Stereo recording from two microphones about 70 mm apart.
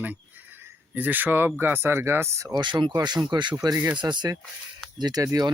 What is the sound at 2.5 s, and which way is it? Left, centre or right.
Speech, right.